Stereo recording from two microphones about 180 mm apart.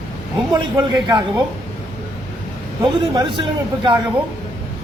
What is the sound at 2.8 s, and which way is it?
A man's voice, 25° right (ahead or behind).